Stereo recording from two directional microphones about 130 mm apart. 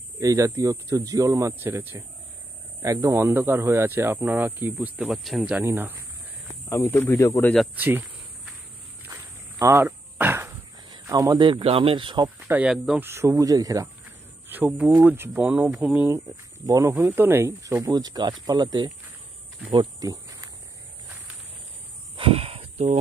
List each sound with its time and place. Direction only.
0.2 s speech: 25° right (ahead or behind)
5.1 s speech: centre (ahead or behind); by 6.0 s 15° right (ahead or behind)
6.7 s speech: 20° left (ahead or behind)
7.7 s speech: 15° right (ahead or behind)
9.1 s a sound: 20° right (ahead or behind)
10.9 s speech: 30° right (ahead or behind)
12.4 s speech: 10° right (ahead or behind)
12.7 s speech: centre (ahead or behind)
13.0 s speech: 20° right (ahead or behind)
14.5 s speech: 15° right (ahead or behind)
16.2 s speech: 25° right (ahead or behind)
17.8 s speech: 30° right (ahead or behind)
19.7 s cricket: 30° right (ahead or behind)
22.1 s a sound: 45° right (ahead or behind)